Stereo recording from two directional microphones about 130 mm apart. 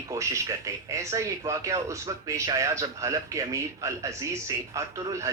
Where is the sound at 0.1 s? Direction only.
25° right (ahead or behind).